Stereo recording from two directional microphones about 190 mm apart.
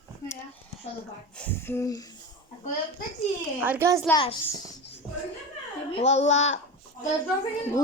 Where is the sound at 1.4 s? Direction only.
10° left (ahead or behind).